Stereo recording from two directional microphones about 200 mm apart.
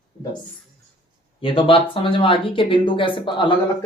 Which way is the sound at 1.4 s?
25° left (ahead or behind).